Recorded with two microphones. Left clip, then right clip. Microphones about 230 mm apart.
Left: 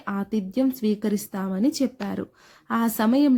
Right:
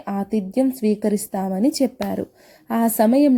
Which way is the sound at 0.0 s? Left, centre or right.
Left.